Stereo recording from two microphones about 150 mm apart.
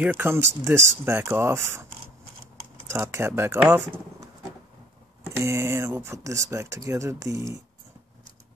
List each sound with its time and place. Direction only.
0.0 s speech: 15° right (ahead or behind)
2.9 s speech: 20° right (ahead or behind)
5.2 s speech: 20° right (ahead or behind)